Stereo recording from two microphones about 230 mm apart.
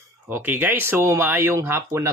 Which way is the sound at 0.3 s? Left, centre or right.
Centre.